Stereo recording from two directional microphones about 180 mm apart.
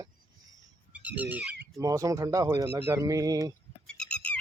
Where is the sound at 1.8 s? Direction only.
20° right (ahead or behind).